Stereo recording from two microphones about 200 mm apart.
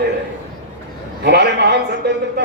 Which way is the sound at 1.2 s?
60° right (ahead or behind).